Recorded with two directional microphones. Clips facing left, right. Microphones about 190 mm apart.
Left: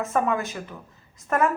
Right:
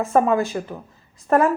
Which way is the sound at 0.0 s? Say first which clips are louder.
Right 6 dB; 30° right (ahead or behind).